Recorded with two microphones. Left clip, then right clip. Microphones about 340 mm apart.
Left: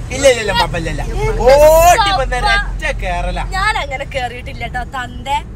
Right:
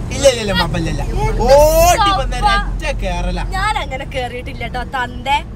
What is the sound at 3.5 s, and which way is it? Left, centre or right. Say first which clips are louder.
A woman's voice: left 2 dB; centre.